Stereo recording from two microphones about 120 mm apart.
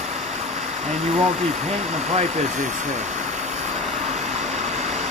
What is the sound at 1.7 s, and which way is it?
Speech, 65° right (ahead or behind).